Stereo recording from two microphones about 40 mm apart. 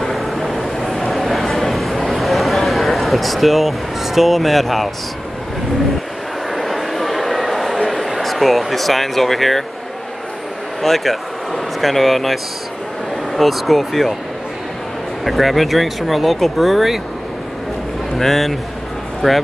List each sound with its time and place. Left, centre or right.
0.0 s a sound: centre
6.5 s a sound: centre
7.8 s speech: centre
10.8 s speech: centre
15.2 s speech: centre
18.1 s speech: centre